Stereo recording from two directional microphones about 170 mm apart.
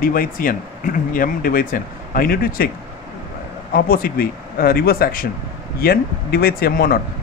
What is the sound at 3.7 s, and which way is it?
Speech, 60° left (ahead or behind).